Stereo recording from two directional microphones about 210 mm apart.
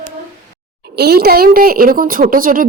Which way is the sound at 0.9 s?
50° right (ahead or behind).